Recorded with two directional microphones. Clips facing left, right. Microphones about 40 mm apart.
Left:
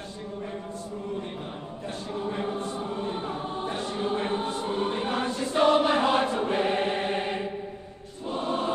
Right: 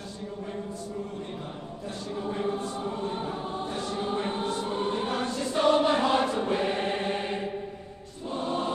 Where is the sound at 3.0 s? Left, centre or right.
Left.